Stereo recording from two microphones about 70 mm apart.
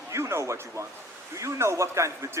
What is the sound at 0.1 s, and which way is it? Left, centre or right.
A man's voice, right.